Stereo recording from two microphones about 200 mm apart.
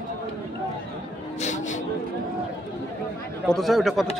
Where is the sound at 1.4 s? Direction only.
35° left (ahead or behind).